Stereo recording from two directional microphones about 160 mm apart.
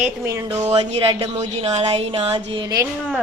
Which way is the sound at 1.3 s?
40° right (ahead or behind).